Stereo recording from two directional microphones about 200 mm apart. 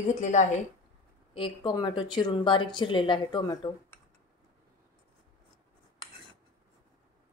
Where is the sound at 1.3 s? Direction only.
25° left (ahead or behind).